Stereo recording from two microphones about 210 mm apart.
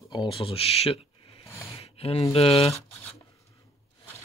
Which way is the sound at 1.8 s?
30° left (ahead or behind).